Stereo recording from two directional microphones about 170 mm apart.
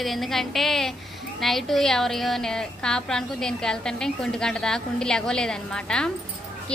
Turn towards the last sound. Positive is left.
turn(degrees=5)  # may be behind; listen again after turning